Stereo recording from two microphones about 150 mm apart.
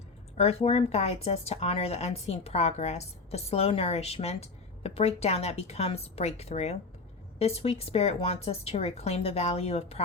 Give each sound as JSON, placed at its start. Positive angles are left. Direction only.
{"t": 0.3, "sound": "speech", "side_deg": 40}